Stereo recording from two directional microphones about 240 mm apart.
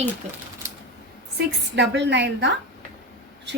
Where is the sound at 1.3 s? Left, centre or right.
Right.